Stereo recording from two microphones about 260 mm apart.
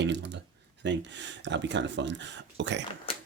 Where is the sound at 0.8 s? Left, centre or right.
Right.